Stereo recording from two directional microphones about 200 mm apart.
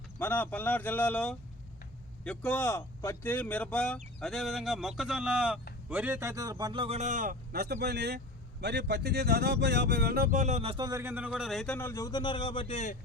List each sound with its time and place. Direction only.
0.2 s a man's voice: 10° left (ahead or behind); by 11.3 s 10° right (ahead or behind)
11.3 s a man's voice: centre (ahead or behind); by 13.0 s 35° left (ahead or behind)